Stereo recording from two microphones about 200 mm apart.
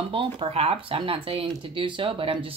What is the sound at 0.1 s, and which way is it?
Speech, 25° right (ahead or behind).